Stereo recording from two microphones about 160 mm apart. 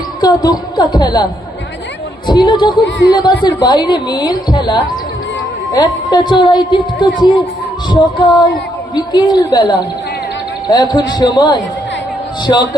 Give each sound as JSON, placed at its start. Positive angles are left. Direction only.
{"t": 0.2, "sound": "a woman's voice", "side_deg": 25}
{"t": 2.3, "sound": "a woman's voice", "side_deg": 30}